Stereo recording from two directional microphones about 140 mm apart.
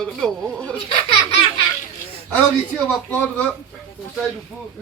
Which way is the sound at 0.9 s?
45° left (ahead or behind).